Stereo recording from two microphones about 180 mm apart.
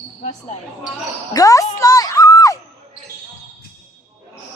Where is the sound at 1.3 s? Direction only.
20° left (ahead or behind).